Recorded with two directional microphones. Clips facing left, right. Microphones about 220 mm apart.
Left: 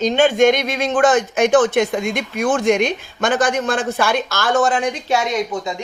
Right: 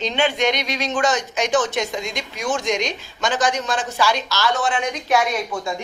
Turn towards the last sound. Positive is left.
turn(degrees=20)  # may be behind; listen again after turning